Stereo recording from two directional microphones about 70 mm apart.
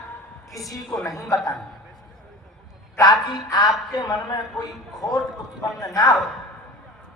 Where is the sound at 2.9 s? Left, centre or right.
Left.